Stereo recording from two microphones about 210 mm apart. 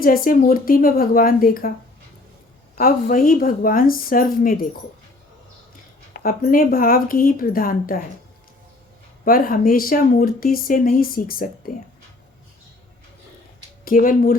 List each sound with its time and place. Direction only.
0.0 s speech: 45° left (ahead or behind)
2.7 s speech: 40° left (ahead or behind)
6.1 s speech: 45° left (ahead or behind)
9.2 s speech: 45° left (ahead or behind)
13.8 s speech: 40° left (ahead or behind)